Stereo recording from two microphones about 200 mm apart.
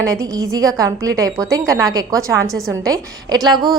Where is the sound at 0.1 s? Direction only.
15° right (ahead or behind).